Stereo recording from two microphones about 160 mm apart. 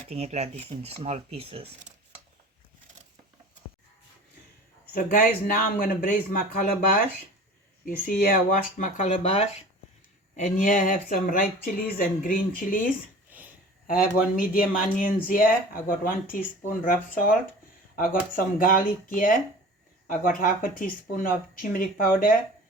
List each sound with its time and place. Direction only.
0.1 s speech: 40° right (ahead or behind)
4.9 s speech: 60° left (ahead or behind)
7.9 s speech: 60° left (ahead or behind)
9.2 s speech: 40° left (ahead or behind)
10.3 s speech: 55° left (ahead or behind)
13.3 s a sound: 10° right (ahead or behind)
13.8 s speech: 60° left (ahead or behind)